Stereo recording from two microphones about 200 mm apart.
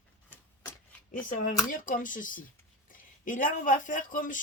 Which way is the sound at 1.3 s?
40° left (ahead or behind).